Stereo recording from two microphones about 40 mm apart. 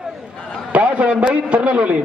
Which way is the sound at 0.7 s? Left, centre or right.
Right.